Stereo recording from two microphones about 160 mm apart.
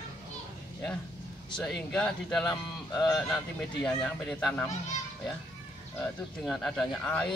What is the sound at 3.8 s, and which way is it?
Speech, 5° left (ahead or behind).